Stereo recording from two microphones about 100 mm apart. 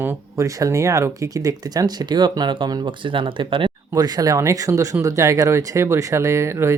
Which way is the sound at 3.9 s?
40° right (ahead or behind).